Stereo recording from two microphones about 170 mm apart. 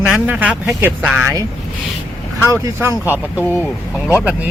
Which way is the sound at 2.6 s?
15° right (ahead or behind).